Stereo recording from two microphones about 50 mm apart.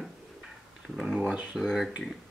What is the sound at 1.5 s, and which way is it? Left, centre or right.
Speech, centre.